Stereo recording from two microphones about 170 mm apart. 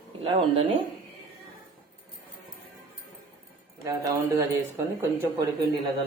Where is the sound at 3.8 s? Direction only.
20° right (ahead or behind).